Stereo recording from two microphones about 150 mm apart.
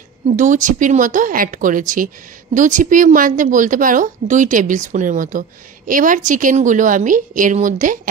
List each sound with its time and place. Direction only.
0.4 s a woman's voice: 55° right (ahead or behind)